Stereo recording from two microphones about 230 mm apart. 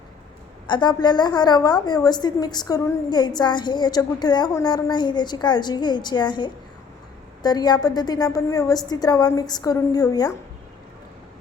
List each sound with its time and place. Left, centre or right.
0.7 s a woman's voice: centre